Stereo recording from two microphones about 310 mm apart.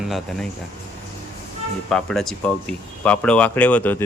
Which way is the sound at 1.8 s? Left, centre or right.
Centre.